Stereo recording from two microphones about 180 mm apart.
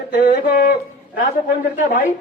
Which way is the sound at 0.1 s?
55° left (ahead or behind).